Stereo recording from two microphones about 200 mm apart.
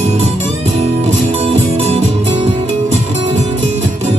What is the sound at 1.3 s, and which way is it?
Music, 30° right (ahead or behind).